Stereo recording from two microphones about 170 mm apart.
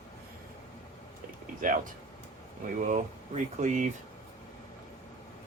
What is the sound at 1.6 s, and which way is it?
Speech, 50° right (ahead or behind).